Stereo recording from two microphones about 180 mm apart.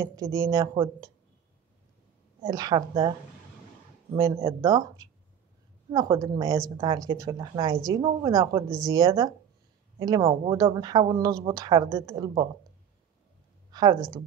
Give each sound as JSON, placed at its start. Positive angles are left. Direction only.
{"t": 0.0, "sound": "speech", "side_deg": -20}
{"t": 2.4, "sound": "speech", "side_deg": -20}
{"t": 4.1, "sound": "speech", "side_deg": -25}
{"t": 13.7, "sound": "a sound", "side_deg": -20}